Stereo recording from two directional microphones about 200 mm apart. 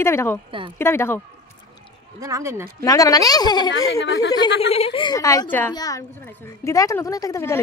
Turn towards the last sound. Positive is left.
turn(degrees=15)  # may be behind; listen again after turning